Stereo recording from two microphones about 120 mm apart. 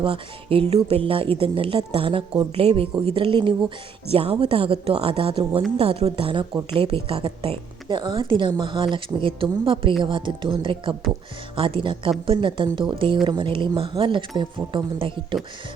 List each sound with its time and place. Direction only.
0.0 s a woman's voice: 50° right (ahead or behind)